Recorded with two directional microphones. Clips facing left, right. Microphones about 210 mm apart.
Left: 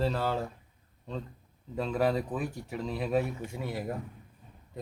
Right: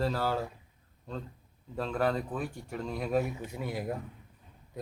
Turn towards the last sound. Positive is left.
turn(degrees=0)  # may be behind; listen again after turning